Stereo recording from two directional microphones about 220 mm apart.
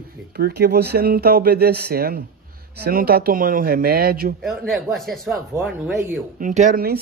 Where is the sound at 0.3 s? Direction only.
45° right (ahead or behind).